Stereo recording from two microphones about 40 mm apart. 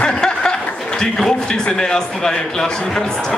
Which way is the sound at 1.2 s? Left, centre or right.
Centre.